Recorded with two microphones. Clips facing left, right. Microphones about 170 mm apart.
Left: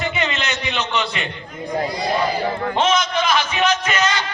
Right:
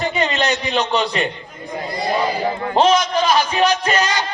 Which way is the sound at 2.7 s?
35° right (ahead or behind).